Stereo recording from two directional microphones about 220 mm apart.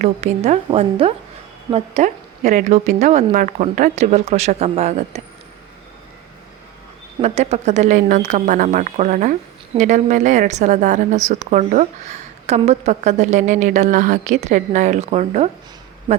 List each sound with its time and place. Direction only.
0.0 s a woman's voice: 30° right (ahead or behind)
7.2 s speech: 30° right (ahead or behind)